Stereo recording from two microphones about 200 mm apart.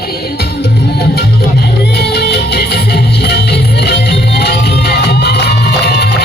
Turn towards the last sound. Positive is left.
turn(degrees=55)  # may be behind; listen again after turning